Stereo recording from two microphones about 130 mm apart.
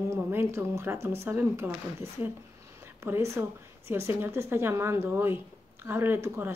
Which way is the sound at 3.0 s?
20° right (ahead or behind).